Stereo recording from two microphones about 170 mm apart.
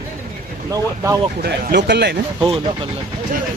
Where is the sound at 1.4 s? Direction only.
70° right (ahead or behind).